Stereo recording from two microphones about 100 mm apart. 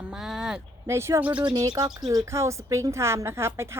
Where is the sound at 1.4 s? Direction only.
45° right (ahead or behind).